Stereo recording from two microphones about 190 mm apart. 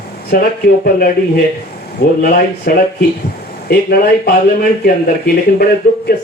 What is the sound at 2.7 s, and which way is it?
A man's voice, 55° left (ahead or behind).